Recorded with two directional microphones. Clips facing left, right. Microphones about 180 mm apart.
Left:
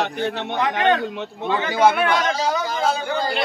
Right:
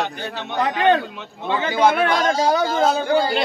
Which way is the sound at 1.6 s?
30° right (ahead or behind).